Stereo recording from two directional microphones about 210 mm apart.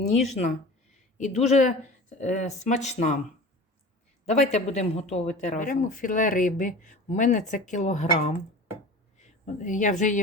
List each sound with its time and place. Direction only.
1.2 s speech: 30° left (ahead or behind)
4.3 s speech: 30° left (ahead or behind)